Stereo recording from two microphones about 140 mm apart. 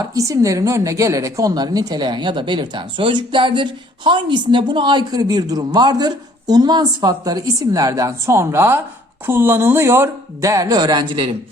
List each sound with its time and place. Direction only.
0.0 s a woman's voice: 25° right (ahead or behind)